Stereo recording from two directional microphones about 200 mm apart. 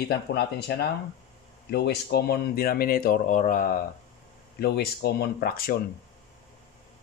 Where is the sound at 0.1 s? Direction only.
55° left (ahead or behind).